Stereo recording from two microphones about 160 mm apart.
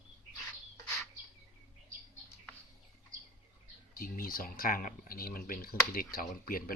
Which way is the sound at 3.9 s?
65° left (ahead or behind).